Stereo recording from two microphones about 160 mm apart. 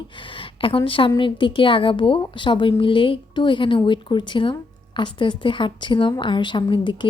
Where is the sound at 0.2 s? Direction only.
35° left (ahead or behind).